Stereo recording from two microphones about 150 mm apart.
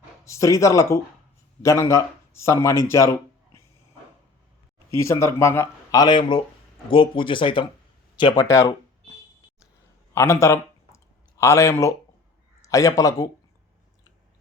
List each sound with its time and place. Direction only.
0.3 s speech: 20° left (ahead or behind)
4.9 s speech: 20° left (ahead or behind)
10.2 s speech: 20° left (ahead or behind)